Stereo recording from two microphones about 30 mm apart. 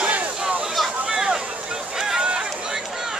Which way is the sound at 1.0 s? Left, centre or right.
Right.